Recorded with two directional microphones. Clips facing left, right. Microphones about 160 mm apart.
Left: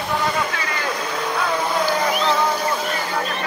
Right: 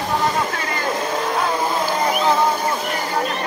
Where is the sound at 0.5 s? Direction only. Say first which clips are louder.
Right 2 dB; 45° right (ahead or behind).